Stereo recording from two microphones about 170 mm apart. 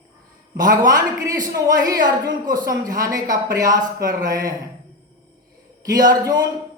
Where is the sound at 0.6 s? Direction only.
20° right (ahead or behind).